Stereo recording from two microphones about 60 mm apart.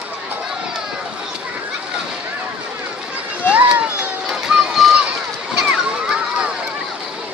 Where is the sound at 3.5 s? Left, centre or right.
Right.